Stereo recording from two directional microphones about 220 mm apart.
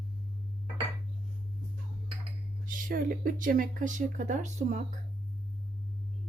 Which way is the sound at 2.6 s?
40° right (ahead or behind).